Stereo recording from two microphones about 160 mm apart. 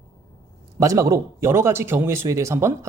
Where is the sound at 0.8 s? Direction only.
20° right (ahead or behind).